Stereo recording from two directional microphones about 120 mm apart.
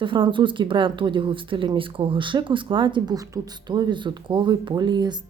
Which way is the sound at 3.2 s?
30° right (ahead or behind).